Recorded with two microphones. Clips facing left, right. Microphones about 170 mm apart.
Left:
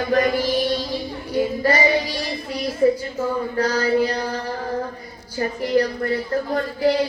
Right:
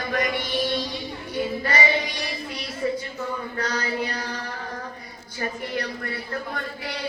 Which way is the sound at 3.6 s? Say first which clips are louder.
Left 9 dB; 35° left (ahead or behind).